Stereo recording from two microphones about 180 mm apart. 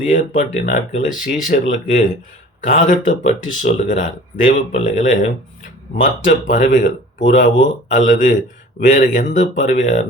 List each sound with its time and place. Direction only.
0.0 s speech: 45° left (ahead or behind)